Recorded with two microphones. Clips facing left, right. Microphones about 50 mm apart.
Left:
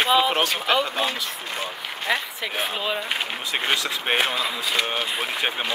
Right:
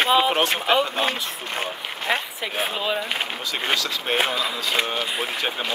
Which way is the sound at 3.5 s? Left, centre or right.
Left.